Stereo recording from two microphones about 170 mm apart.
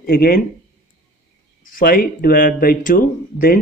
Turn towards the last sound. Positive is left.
turn(degrees=55)  # may be behind; listen again after turning